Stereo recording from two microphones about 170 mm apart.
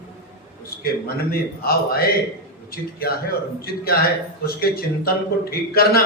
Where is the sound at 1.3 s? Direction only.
65° left (ahead or behind).